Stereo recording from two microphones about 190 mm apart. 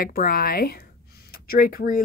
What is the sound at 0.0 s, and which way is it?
Speech, 50° left (ahead or behind).